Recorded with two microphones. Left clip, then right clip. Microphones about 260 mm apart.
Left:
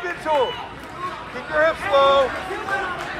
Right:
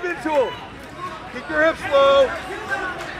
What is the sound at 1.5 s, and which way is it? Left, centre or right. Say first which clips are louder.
Speech: even; right.